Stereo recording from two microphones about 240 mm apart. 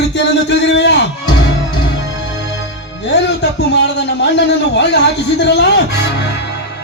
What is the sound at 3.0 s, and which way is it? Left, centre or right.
A man's voice, left.